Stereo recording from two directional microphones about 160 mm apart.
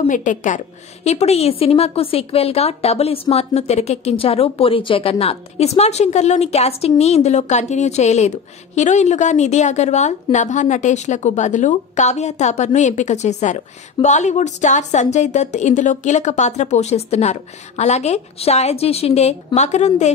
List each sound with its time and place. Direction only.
0.1 s a woman's voice: 55° left (ahead or behind)
1.0 s a woman's voice: 40° left (ahead or behind)